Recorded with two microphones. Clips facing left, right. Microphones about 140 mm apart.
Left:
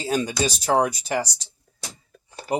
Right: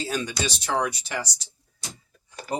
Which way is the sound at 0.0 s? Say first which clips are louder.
Left 5 dB; 40° left (ahead or behind).